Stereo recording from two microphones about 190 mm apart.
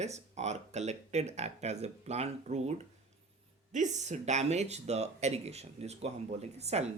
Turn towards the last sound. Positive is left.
turn(degrees=-35)  # may be behind; listen again after turning